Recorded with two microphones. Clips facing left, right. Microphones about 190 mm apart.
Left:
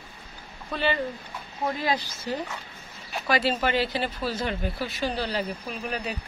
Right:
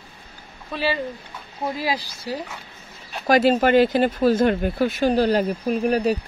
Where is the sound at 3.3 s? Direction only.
45° right (ahead or behind).